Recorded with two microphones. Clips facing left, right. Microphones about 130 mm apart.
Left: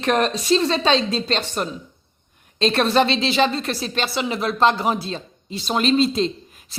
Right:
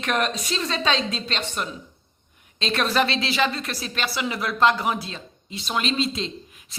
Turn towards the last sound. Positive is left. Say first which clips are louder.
# left 8 dB
turn(degrees=40)  # may be behind; listen again after turning